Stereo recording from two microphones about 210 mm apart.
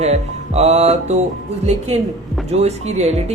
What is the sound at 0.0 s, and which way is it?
Speech, 30° right (ahead or behind).